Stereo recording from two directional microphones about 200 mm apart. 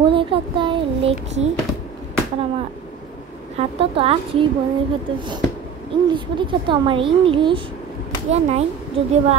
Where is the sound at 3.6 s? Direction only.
30° right (ahead or behind).